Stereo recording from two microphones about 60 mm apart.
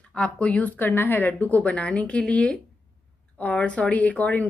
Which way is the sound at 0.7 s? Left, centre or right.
Left.